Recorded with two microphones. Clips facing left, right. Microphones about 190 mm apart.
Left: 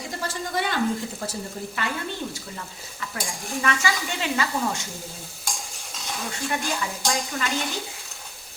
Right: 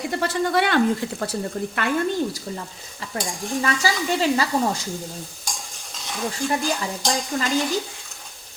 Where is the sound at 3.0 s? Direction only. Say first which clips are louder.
Right 4 dB; 35° right (ahead or behind).